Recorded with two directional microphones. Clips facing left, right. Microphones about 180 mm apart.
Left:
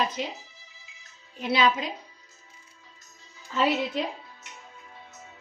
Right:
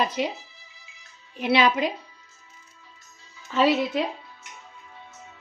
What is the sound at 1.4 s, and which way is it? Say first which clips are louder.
Speech: right 3 dB; 70° right (ahead or behind).